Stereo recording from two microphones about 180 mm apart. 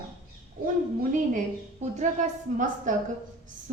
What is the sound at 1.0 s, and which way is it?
Speech, 45° right (ahead or behind).